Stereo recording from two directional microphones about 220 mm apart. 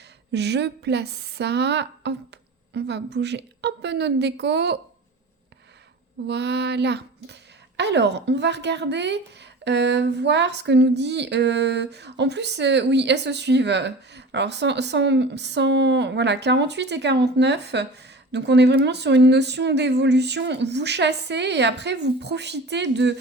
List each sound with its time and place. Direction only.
0.3 s a woman's voice: 50° right (ahead or behind)
6.2 s a woman's voice: 50° right (ahead or behind)